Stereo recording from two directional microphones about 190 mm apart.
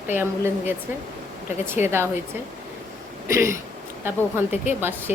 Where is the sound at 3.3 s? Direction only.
15° right (ahead or behind).